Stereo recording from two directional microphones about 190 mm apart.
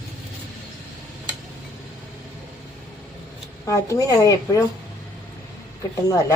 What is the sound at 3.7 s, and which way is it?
Speech, 15° left (ahead or behind).